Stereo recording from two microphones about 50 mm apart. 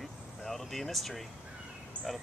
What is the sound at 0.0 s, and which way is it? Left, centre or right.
Vehicle, centre.